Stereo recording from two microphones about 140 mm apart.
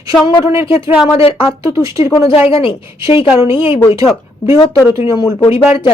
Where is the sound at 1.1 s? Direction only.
40° left (ahead or behind).